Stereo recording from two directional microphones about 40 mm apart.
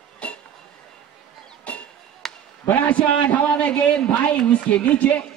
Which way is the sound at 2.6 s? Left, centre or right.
Left.